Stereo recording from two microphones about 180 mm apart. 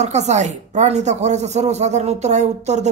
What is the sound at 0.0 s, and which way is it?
Speech, 40° right (ahead or behind).